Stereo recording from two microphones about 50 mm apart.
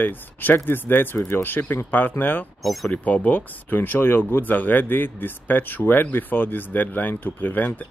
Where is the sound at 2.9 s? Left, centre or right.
Left.